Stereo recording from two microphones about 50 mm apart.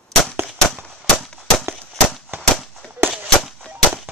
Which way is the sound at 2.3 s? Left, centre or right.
Right.